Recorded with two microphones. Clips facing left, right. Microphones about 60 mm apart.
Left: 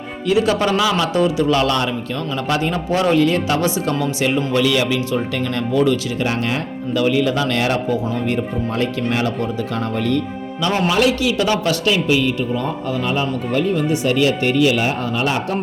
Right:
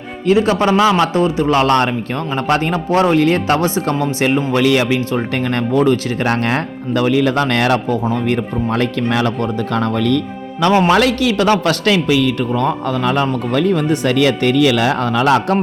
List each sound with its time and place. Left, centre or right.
0.3 s a man's voice: right
10.6 s a man's voice: right